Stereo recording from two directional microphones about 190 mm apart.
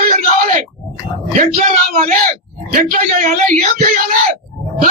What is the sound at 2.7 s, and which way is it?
Speech, 45° right (ahead or behind).